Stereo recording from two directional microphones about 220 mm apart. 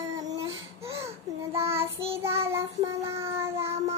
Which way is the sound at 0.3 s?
15° right (ahead or behind).